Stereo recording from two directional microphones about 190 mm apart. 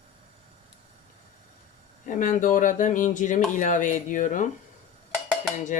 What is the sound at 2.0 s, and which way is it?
Speech, 45° left (ahead or behind).